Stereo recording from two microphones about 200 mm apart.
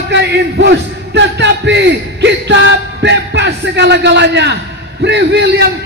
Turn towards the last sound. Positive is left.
turn(degrees=-60)  # may be behind; listen again after turning